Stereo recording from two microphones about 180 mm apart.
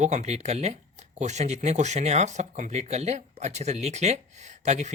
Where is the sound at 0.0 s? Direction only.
40° right (ahead or behind).